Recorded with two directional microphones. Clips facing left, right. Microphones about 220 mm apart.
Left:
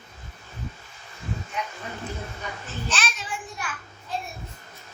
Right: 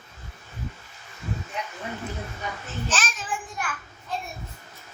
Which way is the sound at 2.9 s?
45° right (ahead or behind).